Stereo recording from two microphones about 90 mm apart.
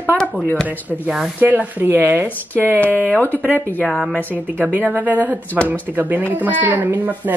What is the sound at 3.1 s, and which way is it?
Speech, 20° left (ahead or behind).